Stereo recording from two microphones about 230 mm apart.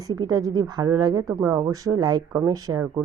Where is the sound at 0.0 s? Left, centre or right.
Centre.